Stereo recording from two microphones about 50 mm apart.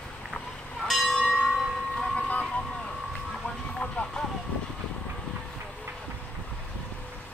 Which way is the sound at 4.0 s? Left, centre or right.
Left.